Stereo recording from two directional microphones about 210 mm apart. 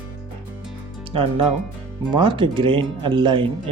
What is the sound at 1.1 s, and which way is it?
Speech, 25° right (ahead or behind).